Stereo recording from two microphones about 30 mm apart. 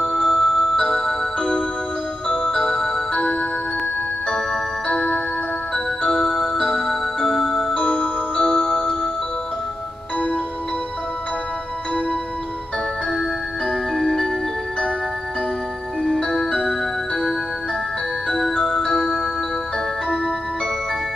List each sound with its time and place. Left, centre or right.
0.1 s tick-tock: centre
2.2 s tick-tock: left
2.5 s tick-tock: centre
4.3 s clock: left
6.0 s tick-tock: centre
7.7 s tick-tock: left
10.1 s music: left
13.9 s music: centre
16.3 s tick-tock: centre
18.4 s tick-tock: centre